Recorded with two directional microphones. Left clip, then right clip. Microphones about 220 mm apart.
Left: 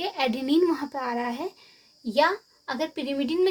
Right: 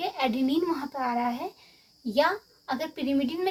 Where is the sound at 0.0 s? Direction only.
50° left (ahead or behind).